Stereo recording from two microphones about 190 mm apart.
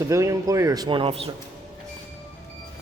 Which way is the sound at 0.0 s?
15° right (ahead or behind).